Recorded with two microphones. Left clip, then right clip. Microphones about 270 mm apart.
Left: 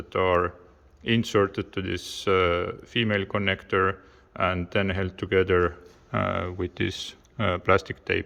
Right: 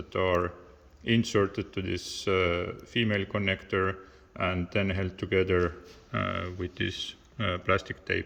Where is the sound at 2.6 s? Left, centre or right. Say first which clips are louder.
Left 3 dB; centre.